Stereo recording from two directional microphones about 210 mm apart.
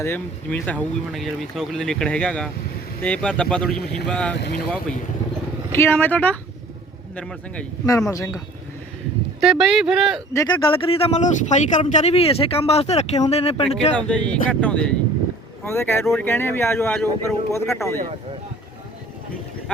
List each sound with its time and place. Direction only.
0.0 s speech: 10° left (ahead or behind)
4.4 s speech: 50° left (ahead or behind)
5.7 s speech: 10° left (ahead or behind)
9.4 s speech: centre (ahead or behind)
10.3 s speech: 20° left (ahead or behind)
13.9 s speech: 5° left (ahead or behind)